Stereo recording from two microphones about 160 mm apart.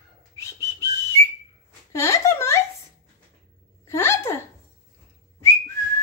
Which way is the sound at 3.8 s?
15° left (ahead or behind).